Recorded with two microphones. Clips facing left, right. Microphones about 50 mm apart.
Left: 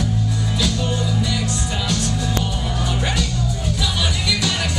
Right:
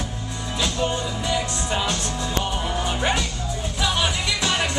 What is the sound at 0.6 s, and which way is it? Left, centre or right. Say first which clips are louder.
Music: right 1 dB; right.